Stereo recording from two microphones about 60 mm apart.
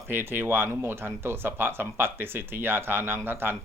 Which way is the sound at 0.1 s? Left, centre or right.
Right.